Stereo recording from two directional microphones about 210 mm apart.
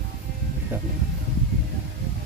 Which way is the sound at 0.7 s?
10° right (ahead or behind).